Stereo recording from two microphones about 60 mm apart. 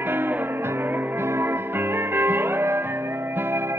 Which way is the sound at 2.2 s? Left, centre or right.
Right.